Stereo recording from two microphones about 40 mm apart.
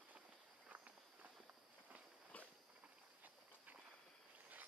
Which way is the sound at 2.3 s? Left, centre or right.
Left.